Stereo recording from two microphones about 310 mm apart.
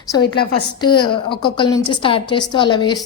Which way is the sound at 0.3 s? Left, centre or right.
Centre.